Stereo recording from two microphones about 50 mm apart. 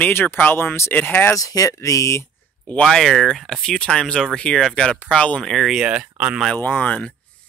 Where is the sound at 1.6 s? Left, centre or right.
Left.